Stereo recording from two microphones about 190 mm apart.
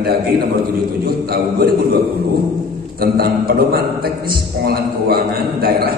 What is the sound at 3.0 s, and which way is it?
A man's voice, 55° right (ahead or behind).